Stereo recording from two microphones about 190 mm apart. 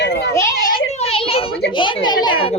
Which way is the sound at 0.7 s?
30° left (ahead or behind).